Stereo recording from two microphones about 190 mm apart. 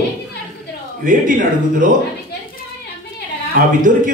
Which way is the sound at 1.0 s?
45° right (ahead or behind).